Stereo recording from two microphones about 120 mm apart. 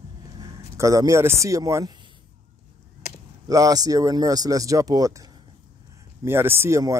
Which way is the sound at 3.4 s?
30° right (ahead or behind).